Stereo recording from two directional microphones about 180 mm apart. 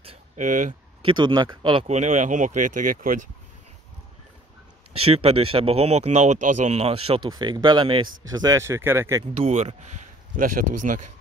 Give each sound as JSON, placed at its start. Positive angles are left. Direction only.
{"t": 0.0, "sound": "a sound", "side_deg": -30}
{"t": 0.5, "sound": "speech", "side_deg": -45}
{"t": 1.0, "sound": "speech", "side_deg": -25}
{"t": 1.9, "sound": "speech", "side_deg": -40}
{"t": 5.0, "sound": "speech", "side_deg": -35}
{"t": 9.3, "sound": "speech", "side_deg": -35}